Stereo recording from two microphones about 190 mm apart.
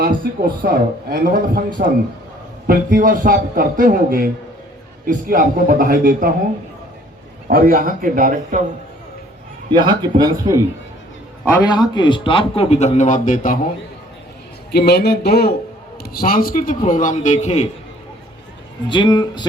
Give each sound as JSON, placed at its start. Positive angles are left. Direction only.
{"t": 0.0, "sound": "a man's voice", "side_deg": -50}
{"t": 7.4, "sound": "a man's voice", "side_deg": -50}
{"t": 9.7, "sound": "speech", "side_deg": -25}
{"t": 11.6, "sound": "a man's voice", "side_deg": 20}
{"t": 14.7, "sound": "a man's voice", "side_deg": 55}
{"t": 18.9, "sound": "speech", "side_deg": 25}